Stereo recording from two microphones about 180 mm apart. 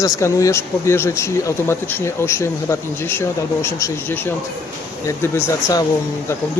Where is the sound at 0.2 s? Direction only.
15° left (ahead or behind).